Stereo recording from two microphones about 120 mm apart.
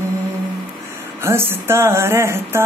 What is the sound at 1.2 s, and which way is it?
Speech, 20° right (ahead or behind).